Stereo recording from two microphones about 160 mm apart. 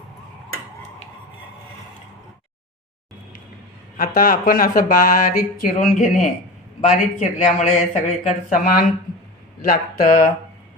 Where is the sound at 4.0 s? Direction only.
60° left (ahead or behind).